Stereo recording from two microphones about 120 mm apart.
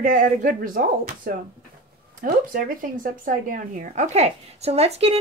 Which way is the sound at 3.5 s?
90° right.